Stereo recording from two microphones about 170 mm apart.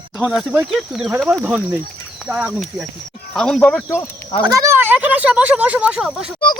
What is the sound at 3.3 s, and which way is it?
Speech, 5° left (ahead or behind).